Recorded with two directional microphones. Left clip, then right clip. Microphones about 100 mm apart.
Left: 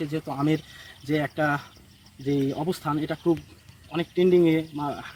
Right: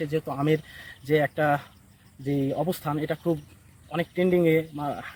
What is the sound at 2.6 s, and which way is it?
Speech, 30° right (ahead or behind).